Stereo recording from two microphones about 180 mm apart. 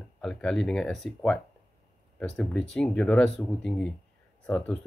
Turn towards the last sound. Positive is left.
turn(degrees=5)  # may be behind; listen again after turning